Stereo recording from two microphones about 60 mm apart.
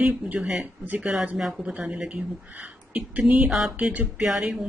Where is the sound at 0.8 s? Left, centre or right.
Right.